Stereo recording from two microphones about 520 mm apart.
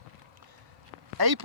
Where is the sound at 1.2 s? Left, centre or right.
Right.